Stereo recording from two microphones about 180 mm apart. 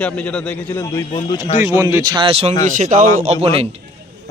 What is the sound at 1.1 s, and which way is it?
Speech, 30° left (ahead or behind).